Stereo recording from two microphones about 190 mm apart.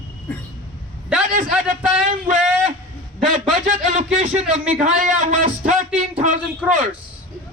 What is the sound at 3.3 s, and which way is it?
A man's voice, 40° right (ahead or behind).